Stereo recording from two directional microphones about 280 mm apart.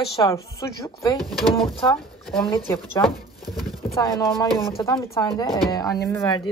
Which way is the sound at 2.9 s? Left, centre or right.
Centre.